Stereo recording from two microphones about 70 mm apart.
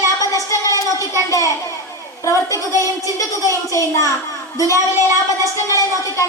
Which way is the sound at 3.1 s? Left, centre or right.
Left.